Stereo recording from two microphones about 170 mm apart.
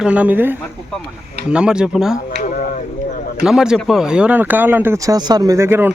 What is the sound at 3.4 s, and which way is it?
Speech, 5° right (ahead or behind).